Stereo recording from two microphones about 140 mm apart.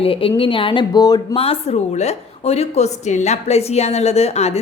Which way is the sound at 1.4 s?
40° left (ahead or behind).